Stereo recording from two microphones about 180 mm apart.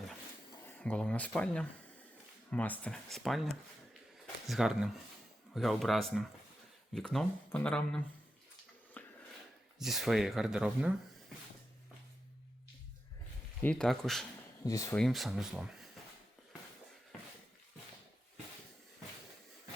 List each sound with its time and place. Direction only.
0.7 s speech: 10° left (ahead or behind)
9.0 s a sound: 10° left (ahead or behind)
9.7 s speech: centre (ahead or behind)
13.6 s speech: 5° left (ahead or behind)
14.6 s speech: 20° left (ahead or behind)
14.9 s speech: centre (ahead or behind)